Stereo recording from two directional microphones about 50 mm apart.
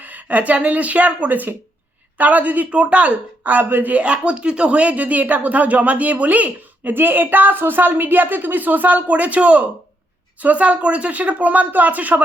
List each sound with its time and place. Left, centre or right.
0.0 s speech: right
3.9 s speech: right
6.9 s speech: right